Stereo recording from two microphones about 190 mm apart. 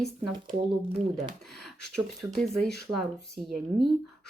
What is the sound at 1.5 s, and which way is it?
Speech, centre (ahead or behind).